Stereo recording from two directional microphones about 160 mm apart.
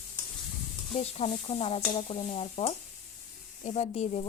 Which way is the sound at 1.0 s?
40° left (ahead or behind).